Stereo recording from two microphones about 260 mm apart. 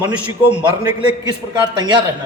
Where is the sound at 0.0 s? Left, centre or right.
Centre.